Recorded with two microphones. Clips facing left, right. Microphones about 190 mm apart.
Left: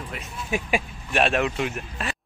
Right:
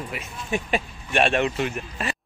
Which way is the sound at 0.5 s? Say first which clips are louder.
Even; 5° left (ahead or behind).